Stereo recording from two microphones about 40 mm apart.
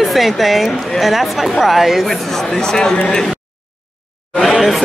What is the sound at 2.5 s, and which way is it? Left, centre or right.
Speech, centre.